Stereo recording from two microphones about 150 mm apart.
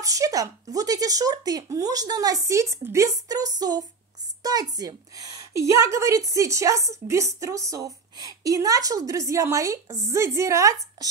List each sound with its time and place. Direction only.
0.0 s a woman's voice: 25° right (ahead or behind)